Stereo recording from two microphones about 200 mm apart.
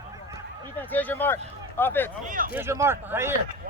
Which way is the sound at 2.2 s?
40° right (ahead or behind).